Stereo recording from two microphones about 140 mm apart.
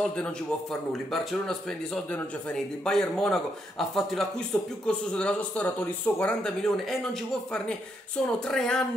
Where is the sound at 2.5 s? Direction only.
5° left (ahead or behind).